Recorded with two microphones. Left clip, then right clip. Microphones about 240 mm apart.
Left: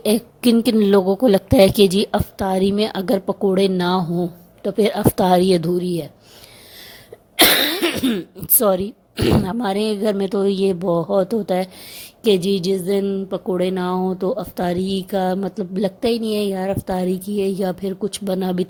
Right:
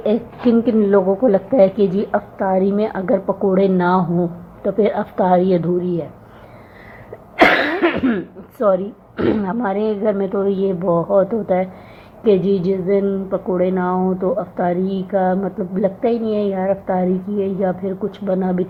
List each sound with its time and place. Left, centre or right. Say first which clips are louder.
0.0 s a woman's voice: right 1 dB; left
7.3 s a woman's voice: right 2 dB; left
10.8 s speech: right 6 dB; left
11.2 s a woman's voice: right 3 dB; left
12.2 s a woman's voice: right 2 dB; left